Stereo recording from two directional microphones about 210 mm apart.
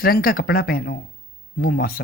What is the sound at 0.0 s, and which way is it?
A woman's voice, 45° left (ahead or behind).